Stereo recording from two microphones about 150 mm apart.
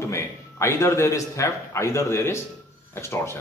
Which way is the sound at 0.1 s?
20° left (ahead or behind).